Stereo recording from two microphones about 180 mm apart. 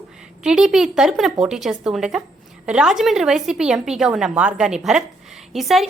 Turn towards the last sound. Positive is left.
turn(degrees=0)  # may be behind; listen again after turning